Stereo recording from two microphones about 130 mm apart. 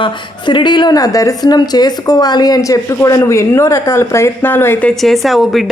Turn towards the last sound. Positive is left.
turn(degrees=0)  # may be behind; listen again after turning